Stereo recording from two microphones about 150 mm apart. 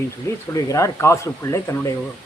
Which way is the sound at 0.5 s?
20° left (ahead or behind).